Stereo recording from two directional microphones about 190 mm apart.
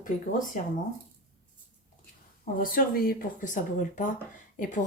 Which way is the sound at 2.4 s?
45° left (ahead or behind).